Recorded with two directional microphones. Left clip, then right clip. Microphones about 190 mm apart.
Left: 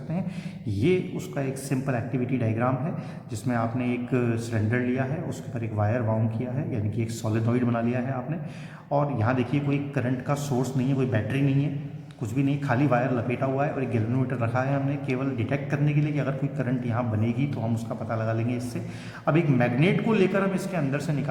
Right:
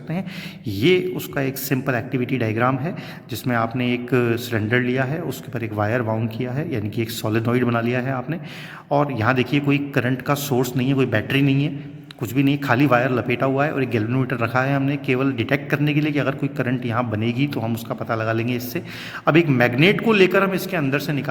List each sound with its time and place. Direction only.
0.8 s a man's voice: 40° right (ahead or behind)